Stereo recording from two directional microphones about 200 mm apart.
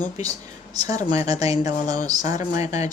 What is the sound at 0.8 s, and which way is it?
Speech, 20° right (ahead or behind).